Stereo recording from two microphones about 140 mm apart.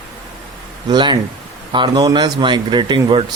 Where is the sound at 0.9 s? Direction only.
35° right (ahead or behind).